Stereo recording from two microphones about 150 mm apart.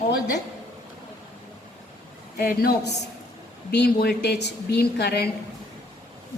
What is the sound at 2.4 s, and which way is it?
A woman's voice, 90° left.